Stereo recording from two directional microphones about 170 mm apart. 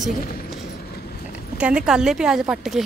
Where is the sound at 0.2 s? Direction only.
60° left (ahead or behind).